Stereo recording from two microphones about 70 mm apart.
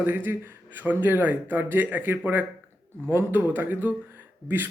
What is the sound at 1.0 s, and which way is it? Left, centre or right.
Speech, right.